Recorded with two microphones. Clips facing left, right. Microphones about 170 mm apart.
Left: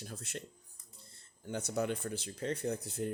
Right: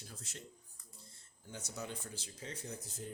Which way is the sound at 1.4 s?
65° left (ahead or behind).